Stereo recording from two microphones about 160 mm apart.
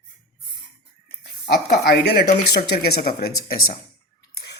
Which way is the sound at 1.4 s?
90° left.